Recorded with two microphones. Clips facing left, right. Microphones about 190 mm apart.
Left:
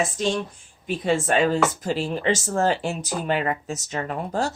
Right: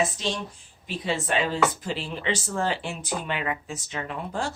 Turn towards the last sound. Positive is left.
turn(degrees=40)  # may be behind; listen again after turning